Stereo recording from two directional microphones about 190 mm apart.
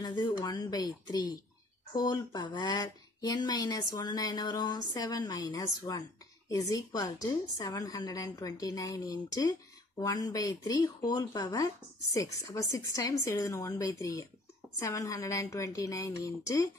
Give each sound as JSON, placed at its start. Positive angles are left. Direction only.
{"t": 0.0, "sound": "a woman's voice", "side_deg": 20}